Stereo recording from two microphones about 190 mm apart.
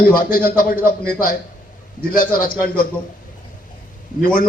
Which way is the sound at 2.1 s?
50° left (ahead or behind).